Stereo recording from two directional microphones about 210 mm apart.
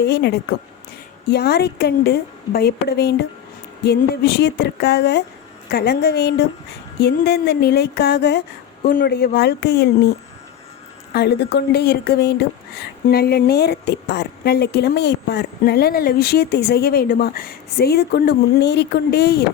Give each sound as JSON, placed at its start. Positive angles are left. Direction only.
{"t": 0.0, "sound": "speech", "side_deg": 50}
{"t": 8.8, "sound": "speech", "side_deg": 45}
{"t": 11.1, "sound": "speech", "side_deg": 50}